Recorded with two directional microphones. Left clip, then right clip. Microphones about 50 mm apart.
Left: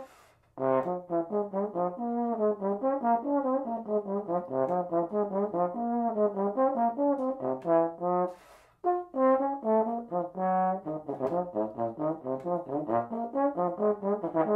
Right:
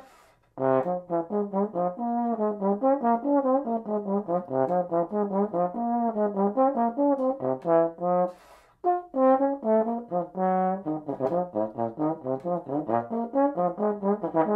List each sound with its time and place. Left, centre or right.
0.6 s brass instrument: centre